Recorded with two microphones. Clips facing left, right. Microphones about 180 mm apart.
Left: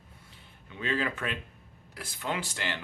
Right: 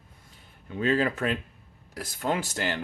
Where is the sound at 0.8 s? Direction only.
40° right (ahead or behind).